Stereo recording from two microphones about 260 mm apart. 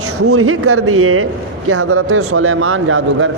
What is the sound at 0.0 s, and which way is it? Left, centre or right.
Speech, right.